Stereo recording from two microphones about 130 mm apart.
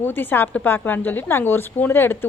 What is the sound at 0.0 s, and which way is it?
A woman's voice, 15° left (ahead or behind).